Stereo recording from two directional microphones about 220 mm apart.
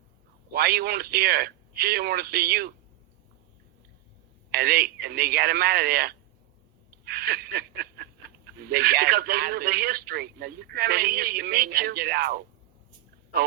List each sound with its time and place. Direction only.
0.5 s speech: 45° right (ahead or behind)
4.5 s speech: 45° right (ahead or behind)
7.0 s a sound: 45° right (ahead or behind)
8.7 s speech: 45° right (ahead or behind)